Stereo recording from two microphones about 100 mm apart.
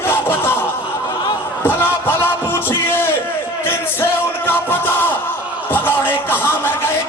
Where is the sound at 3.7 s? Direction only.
20° left (ahead or behind).